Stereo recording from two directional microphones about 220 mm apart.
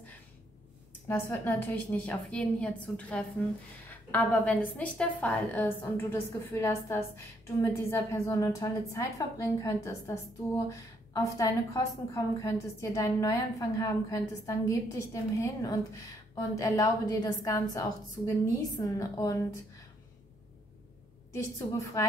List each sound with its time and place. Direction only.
1.0 s a woman's voice: 10° left (ahead or behind)
11.2 s a woman's voice: 15° left (ahead or behind)
21.3 s a woman's voice: 15° left (ahead or behind)